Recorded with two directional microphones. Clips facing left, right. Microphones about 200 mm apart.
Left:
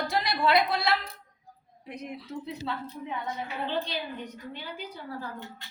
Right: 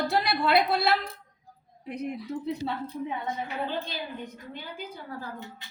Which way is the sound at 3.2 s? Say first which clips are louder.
Right 2 dB; 55° right (ahead or behind).